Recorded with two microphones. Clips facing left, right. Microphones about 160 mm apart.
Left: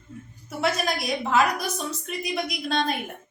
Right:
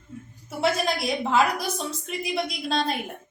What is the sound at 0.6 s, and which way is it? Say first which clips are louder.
A woman's voice: right 2 dB; 25° right (ahead or behind).